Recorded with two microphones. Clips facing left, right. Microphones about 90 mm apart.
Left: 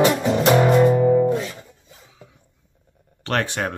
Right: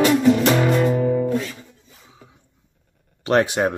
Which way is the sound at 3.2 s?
15° right (ahead or behind).